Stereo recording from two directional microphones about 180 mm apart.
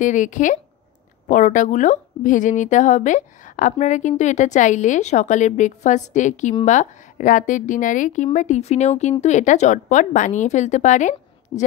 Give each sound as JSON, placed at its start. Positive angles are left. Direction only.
{"t": 0.0, "sound": "a woman's voice", "side_deg": 45}